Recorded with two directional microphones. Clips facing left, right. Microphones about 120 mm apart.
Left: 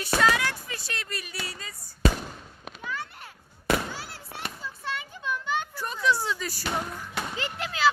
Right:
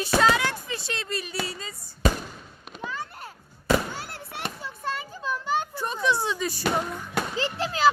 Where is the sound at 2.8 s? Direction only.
35° right (ahead or behind).